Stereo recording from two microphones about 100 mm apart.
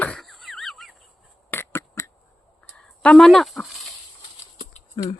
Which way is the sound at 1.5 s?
25° left (ahead or behind).